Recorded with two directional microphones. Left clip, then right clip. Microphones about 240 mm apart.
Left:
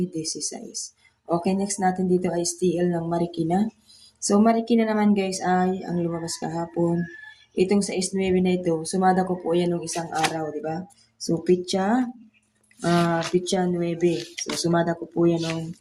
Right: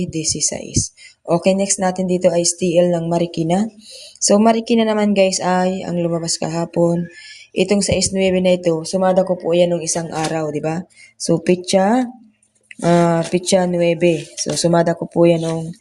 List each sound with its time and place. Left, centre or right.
0.0 s speech: right